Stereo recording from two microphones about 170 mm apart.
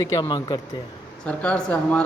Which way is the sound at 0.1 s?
25° left (ahead or behind).